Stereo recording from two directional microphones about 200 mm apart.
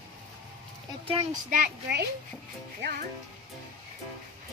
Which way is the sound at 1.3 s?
45° right (ahead or behind).